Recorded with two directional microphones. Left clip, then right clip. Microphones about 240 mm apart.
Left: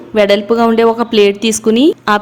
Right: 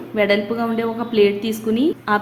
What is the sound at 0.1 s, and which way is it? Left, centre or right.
A woman's voice, left.